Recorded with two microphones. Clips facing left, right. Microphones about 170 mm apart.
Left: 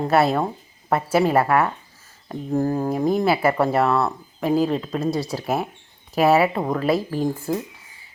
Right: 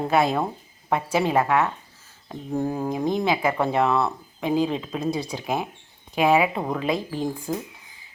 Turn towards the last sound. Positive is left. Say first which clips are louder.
# left 4 dB
turn(degrees=5)  # may be behind; listen again after turning